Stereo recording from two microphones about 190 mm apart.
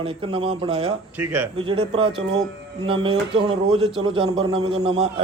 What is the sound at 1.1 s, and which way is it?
Speech, 10° right (ahead or behind).